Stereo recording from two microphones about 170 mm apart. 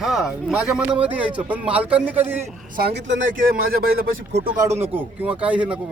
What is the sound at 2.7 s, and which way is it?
Speech, 75° right (ahead or behind).